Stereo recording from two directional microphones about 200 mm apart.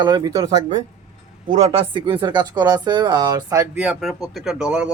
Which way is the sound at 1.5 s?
30° right (ahead or behind).